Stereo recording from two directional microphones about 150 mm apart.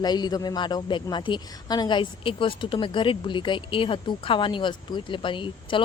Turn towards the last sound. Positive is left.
turn(degrees=35)  # may be behind; listen again after turning